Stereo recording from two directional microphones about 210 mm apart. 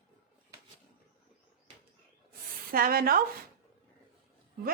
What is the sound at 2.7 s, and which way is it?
Speech, 45° right (ahead or behind).